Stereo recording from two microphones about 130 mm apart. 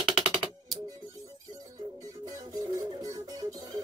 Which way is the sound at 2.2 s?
30° right (ahead or behind).